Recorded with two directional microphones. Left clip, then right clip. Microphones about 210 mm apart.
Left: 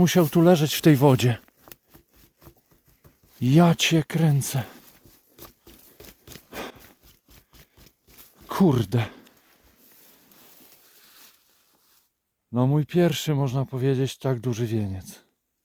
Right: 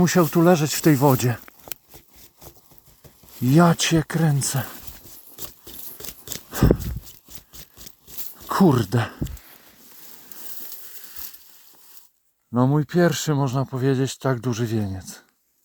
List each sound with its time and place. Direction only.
0.0 s speech: 15° left (ahead or behind)
3.4 s speech: 10° left (ahead or behind)
7.6 s a sound: 35° right (ahead or behind)
8.4 s speech: 5° left (ahead or behind)
11.0 s a sound: 40° right (ahead or behind)
12.5 s speech: 5° left (ahead or behind)